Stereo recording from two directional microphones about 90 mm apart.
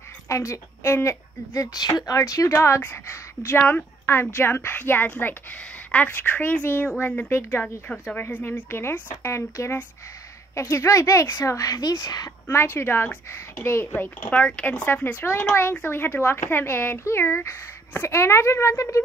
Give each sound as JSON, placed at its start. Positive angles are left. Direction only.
{"t": 0.3, "sound": "a woman's voice", "side_deg": 35}
{"t": 8.6, "sound": "a woman's voice", "side_deg": 25}
{"t": 12.4, "sound": "a woman's voice", "side_deg": 30}
{"t": 15.1, "sound": "a woman's voice", "side_deg": 30}